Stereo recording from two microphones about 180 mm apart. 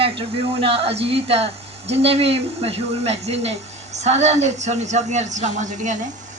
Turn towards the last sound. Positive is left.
turn(degrees=-45)  # may be behind; listen again after turning